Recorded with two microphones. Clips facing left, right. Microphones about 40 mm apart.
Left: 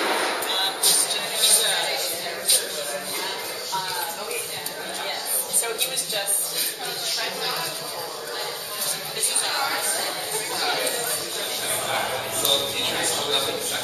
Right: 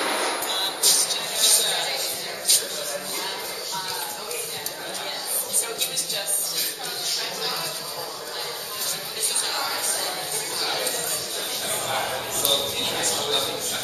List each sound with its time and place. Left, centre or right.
0.0 s music: centre
9.5 s music: centre
10.6 s chatter: centre
11.7 s a sound: centre